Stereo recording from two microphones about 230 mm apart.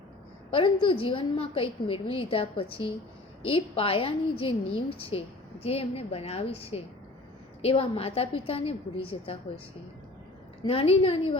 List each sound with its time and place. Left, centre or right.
0.5 s a woman's voice: left
10.6 s a woman's voice: left